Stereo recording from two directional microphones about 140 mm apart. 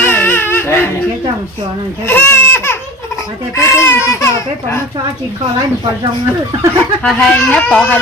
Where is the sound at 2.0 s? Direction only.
15° left (ahead or behind).